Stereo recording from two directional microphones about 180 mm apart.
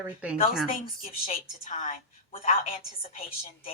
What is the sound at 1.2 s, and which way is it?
A woman's voice, 35° left (ahead or behind).